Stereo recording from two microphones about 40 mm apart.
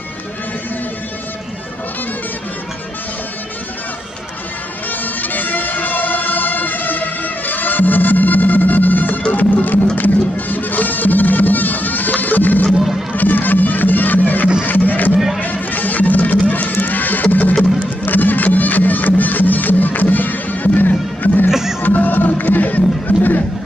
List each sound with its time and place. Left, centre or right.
5.0 s music: left
15.1 s music: centre
15.4 s music: left
21.5 s music: centre
21.8 s music: left